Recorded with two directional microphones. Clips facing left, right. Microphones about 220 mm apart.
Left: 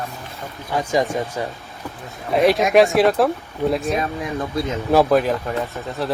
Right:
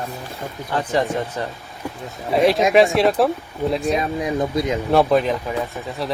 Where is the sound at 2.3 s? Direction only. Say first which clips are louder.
Even; centre (ahead or behind).